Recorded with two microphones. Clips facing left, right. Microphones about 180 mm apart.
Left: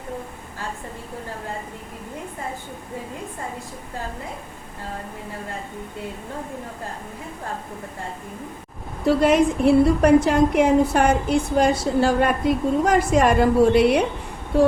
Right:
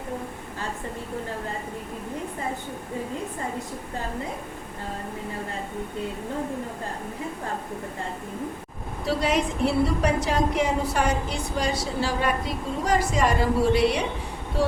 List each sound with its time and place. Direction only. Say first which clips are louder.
9.0 s a woman's voice: left 8 dB; 55° left (ahead or behind)